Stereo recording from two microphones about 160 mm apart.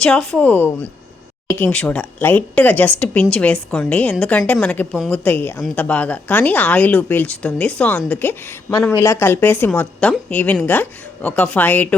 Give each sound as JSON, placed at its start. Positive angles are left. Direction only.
{"t": 0.0, "sound": "speech", "side_deg": 5}